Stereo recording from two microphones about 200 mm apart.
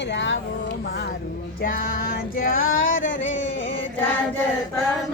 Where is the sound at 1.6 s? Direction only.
45° left (ahead or behind).